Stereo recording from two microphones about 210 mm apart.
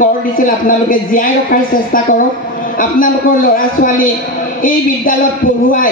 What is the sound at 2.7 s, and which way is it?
A woman's voice, 40° left (ahead or behind).